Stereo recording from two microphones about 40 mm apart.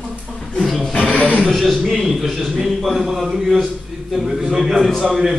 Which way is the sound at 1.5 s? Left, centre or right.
Centre.